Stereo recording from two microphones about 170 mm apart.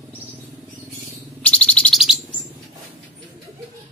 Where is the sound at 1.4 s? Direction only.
5° left (ahead or behind).